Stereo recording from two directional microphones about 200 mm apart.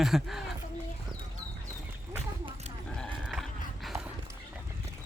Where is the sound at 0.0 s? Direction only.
Centre (ahead or behind).